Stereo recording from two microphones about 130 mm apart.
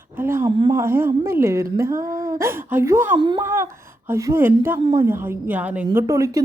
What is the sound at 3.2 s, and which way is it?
Speech, 35° right (ahead or behind).